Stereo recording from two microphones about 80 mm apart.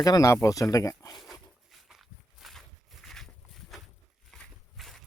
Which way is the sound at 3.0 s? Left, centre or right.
Centre.